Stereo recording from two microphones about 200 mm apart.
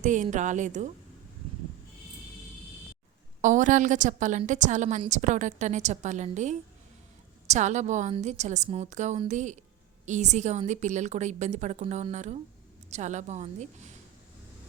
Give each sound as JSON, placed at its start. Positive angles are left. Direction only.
{"t": 0.0, "sound": "a woman's voice", "side_deg": -40}
{"t": 3.4, "sound": "a woman's voice", "side_deg": -40}